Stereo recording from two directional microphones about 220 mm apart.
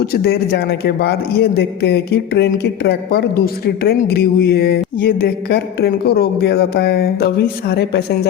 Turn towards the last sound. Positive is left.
turn(degrees=45)  # may be behind; listen again after turning